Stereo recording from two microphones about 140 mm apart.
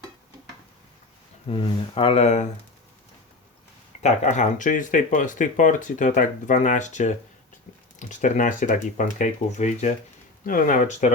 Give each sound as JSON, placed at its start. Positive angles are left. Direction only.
{"t": 1.5, "sound": "speech", "side_deg": 40}
{"t": 4.0, "sound": "speech", "side_deg": 55}
{"t": 10.4, "sound": "speech", "side_deg": 75}